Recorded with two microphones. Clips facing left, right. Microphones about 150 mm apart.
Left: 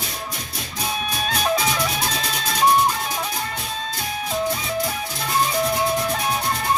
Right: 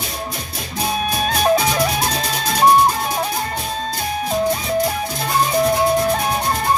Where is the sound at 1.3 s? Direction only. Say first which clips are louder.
Right 5 dB; 45° right (ahead or behind).